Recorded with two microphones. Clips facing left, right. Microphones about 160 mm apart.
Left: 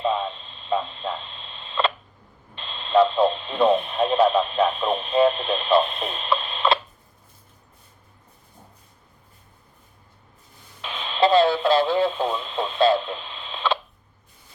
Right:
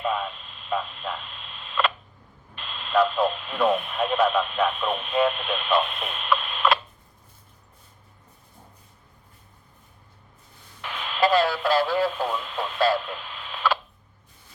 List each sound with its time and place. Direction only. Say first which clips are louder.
0.0 s radio: left 3 dB; 25° left (ahead or behind)
10.8 s radio: left 3 dB; 20° left (ahead or behind)